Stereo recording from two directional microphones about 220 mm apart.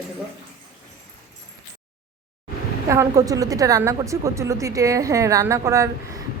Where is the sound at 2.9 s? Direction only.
15° right (ahead or behind).